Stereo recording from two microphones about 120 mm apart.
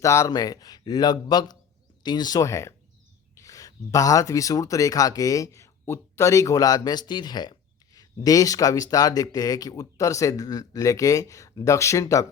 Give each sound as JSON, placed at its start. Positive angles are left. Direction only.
{"t": 0.0, "sound": "speech", "side_deg": 25}